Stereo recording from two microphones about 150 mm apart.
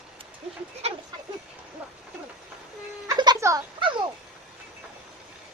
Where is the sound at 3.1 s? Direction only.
25° right (ahead or behind).